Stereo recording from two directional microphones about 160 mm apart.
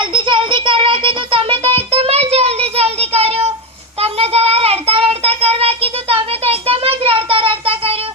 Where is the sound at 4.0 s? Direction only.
40° right (ahead or behind).